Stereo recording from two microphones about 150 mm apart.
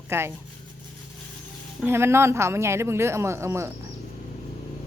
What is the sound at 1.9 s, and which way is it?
A man's voice, 15° right (ahead or behind).